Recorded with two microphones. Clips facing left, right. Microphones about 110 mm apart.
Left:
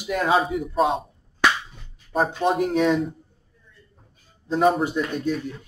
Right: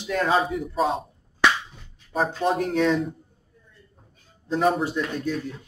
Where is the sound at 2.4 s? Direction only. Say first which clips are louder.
Left 1 dB; 10° left (ahead or behind).